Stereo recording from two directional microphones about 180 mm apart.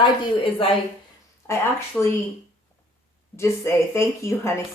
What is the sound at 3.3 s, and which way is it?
Speech, 15° left (ahead or behind).